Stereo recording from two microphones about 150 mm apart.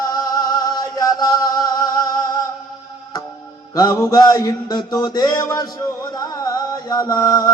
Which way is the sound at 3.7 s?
25° left (ahead or behind).